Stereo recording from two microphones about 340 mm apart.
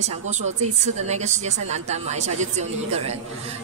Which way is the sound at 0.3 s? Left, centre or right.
Centre.